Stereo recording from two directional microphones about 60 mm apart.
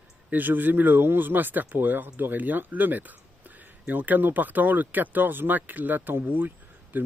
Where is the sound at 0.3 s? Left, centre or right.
Right.